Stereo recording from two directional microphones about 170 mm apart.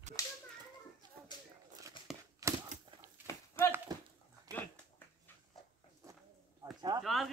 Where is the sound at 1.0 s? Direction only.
25° right (ahead or behind).